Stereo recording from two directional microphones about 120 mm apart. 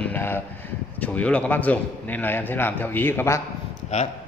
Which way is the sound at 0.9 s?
10° left (ahead or behind).